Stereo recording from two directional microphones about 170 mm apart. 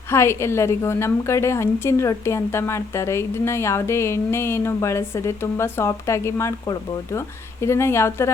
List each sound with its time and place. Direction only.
0.1 s a woman's voice: 15° left (ahead or behind)